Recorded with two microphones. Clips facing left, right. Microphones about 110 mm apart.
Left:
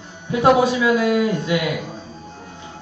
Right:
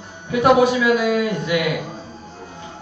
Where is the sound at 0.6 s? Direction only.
25° left (ahead or behind).